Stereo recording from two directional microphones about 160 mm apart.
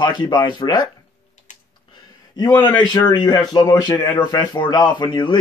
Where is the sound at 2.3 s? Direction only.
25° left (ahead or behind).